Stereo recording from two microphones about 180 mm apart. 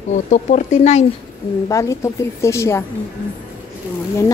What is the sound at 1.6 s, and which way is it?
Speech, 15° left (ahead or behind).